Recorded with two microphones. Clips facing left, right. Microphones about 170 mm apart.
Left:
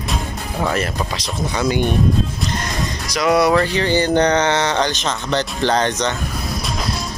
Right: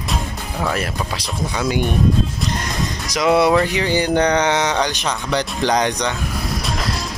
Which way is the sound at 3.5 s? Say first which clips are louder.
Left 1 dB; 10° right (ahead or behind).